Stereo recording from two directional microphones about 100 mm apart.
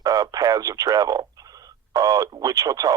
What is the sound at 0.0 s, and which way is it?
Speech, 35° right (ahead or behind).